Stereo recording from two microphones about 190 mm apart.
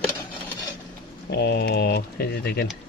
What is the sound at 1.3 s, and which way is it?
Speech, 60° left (ahead or behind).